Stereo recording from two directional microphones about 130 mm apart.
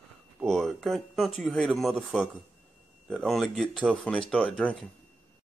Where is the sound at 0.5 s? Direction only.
Centre (ahead or behind).